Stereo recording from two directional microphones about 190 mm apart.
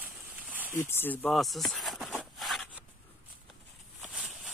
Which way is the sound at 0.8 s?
10° left (ahead or behind).